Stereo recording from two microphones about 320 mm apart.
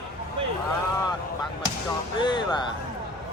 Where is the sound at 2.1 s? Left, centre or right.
Centre.